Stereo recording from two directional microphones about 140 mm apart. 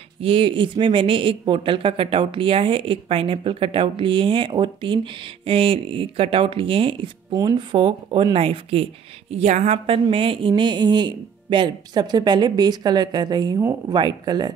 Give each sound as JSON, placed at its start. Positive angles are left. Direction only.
{"t": 0.2, "sound": "speech", "side_deg": -40}
{"t": 7.3, "sound": "speech", "side_deg": -30}
{"t": 9.3, "sound": "speech", "side_deg": -55}
{"t": 13.6, "sound": "a woman's voice", "side_deg": -20}
{"t": 13.9, "sound": "speech", "side_deg": -30}